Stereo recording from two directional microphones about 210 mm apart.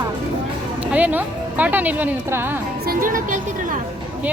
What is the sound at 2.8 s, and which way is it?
Speech, 45° right (ahead or behind).